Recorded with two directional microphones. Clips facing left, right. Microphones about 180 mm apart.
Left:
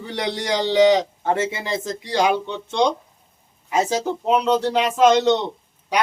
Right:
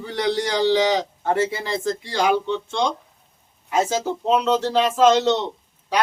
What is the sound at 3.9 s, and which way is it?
Speech, 15° left (ahead or behind).